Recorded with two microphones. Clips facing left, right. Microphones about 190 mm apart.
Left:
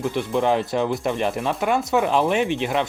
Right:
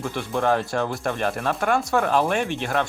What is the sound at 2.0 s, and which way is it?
Speech, 15° left (ahead or behind).